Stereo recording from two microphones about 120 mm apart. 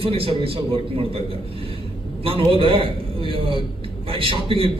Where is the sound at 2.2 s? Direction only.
50° right (ahead or behind).